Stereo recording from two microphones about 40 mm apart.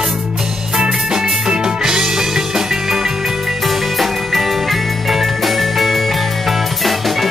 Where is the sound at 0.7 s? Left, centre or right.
Centre.